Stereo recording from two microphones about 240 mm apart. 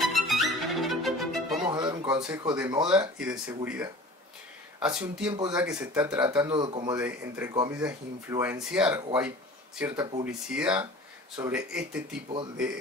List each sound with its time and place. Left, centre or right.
0.0 s violin: centre
1.7 s music: centre
2.2 s speech: centre
6.4 s speech: centre